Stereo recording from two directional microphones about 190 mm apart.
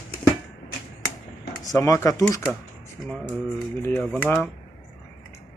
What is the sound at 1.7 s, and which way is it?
Speech, 15° left (ahead or behind).